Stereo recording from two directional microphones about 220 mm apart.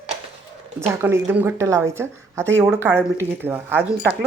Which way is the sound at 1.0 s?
10° right (ahead or behind).